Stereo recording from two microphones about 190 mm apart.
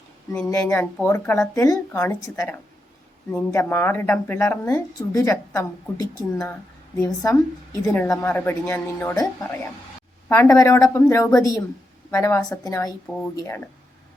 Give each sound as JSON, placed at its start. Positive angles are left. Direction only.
{"t": 0.3, "sound": "a woman's voice", "side_deg": 5}
{"t": 6.9, "sound": "a woman's voice", "side_deg": 5}
{"t": 7.8, "sound": "a woman's voice", "side_deg": 15}
{"t": 10.2, "sound": "a woman's voice", "side_deg": 10}